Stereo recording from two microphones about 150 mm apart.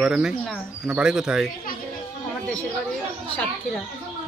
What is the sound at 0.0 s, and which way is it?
Speech, 5° right (ahead or behind).